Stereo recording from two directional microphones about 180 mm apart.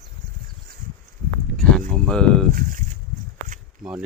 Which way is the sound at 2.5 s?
50° right (ahead or behind).